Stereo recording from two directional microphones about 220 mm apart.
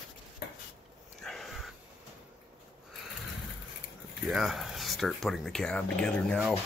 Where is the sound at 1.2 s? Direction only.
Centre (ahead or behind).